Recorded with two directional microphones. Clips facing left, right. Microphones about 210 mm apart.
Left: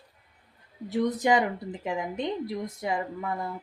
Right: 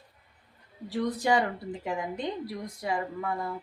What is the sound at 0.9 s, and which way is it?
A woman's voice, 20° left (ahead or behind).